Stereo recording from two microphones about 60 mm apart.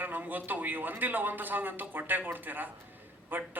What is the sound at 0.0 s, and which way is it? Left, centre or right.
A man's voice, right.